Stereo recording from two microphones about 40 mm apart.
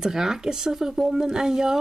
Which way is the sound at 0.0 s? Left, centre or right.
Centre.